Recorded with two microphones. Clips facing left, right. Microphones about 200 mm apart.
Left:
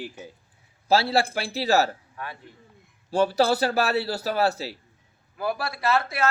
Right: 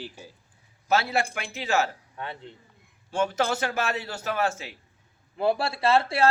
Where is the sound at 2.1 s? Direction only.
25° right (ahead or behind).